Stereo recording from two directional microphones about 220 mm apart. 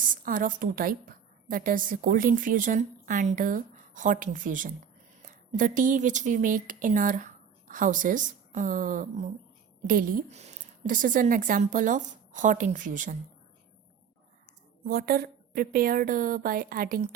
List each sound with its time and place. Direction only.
0.0 s a woman's voice: 40° right (ahead or behind)
14.8 s a woman's voice: 45° right (ahead or behind)